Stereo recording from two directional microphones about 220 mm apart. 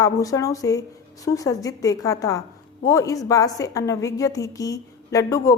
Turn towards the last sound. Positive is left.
turn(degrees=15)  # may be behind; listen again after turning